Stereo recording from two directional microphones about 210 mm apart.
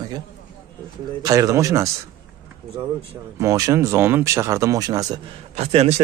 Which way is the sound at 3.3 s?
15° right (ahead or behind).